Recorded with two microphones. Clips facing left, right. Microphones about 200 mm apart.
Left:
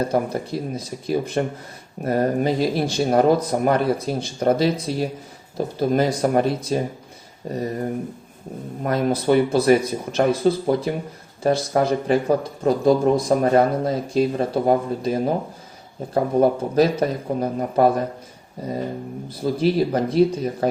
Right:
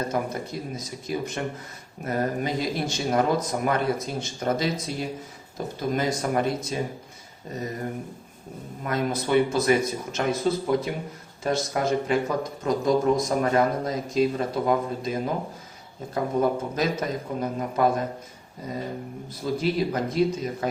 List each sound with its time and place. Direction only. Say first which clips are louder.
0.1 s speech: left 6 dB; 30° left (ahead or behind)
8.8 s speech: left 6 dB; 35° left (ahead or behind)
19.4 s speech: left 5 dB; 30° left (ahead or behind)